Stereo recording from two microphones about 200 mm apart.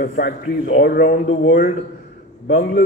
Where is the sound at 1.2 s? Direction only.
60° left (ahead or behind).